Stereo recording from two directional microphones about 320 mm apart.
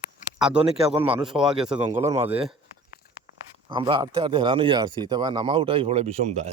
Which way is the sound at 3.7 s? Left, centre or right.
Centre.